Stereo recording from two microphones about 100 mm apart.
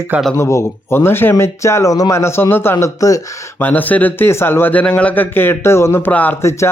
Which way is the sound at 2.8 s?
35° left (ahead or behind).